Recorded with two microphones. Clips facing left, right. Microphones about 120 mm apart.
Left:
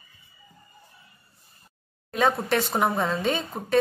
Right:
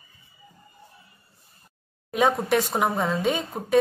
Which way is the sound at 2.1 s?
10° right (ahead or behind).